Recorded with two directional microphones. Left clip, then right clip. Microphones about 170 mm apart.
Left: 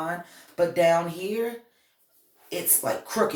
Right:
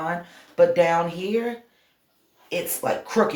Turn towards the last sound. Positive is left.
turn(degrees=-35)  # may be behind; listen again after turning